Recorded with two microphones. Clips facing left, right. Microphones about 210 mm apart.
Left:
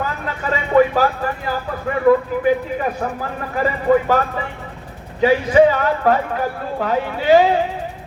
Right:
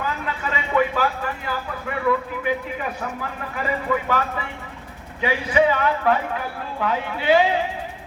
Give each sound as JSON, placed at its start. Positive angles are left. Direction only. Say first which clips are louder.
{"t": 0.0, "sound": "speech", "louder": "left 3 dB", "side_deg": 40}